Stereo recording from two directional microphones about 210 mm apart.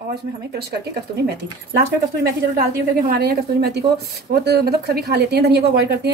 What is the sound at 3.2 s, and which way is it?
Speech, 50° right (ahead or behind).